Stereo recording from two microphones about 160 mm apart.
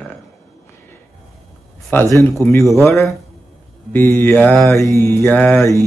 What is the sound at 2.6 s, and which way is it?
Mantra, centre (ahead or behind).